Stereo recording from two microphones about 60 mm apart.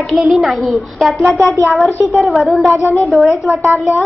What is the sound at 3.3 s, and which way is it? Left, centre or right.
Speech, right.